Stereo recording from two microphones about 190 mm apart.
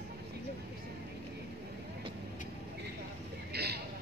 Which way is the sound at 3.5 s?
60° right (ahead or behind).